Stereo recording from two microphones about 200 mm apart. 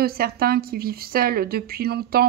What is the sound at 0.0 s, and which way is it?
Speech, 50° right (ahead or behind).